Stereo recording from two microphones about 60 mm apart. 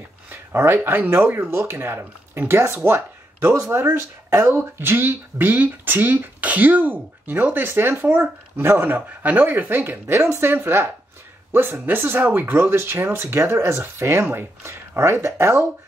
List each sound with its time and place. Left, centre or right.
0.3 s speech: right